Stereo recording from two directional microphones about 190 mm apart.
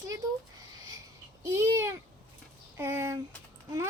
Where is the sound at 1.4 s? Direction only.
15° right (ahead or behind).